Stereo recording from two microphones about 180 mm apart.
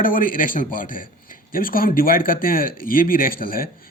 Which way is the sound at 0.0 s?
50° left (ahead or behind).